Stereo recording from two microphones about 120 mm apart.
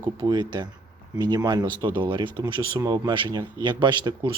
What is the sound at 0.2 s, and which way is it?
Speech, 35° right (ahead or behind).